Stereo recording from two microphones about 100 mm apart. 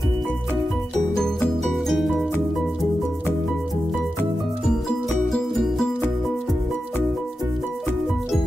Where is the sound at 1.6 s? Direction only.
Centre (ahead or behind).